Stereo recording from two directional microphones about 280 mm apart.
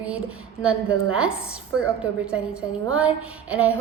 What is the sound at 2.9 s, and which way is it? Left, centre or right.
Speech, centre.